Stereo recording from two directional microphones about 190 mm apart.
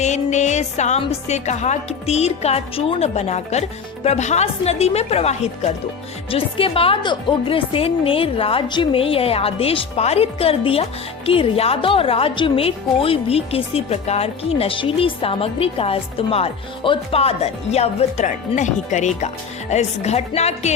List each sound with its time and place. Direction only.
0.0 s a woman's voice: 40° left (ahead or behind)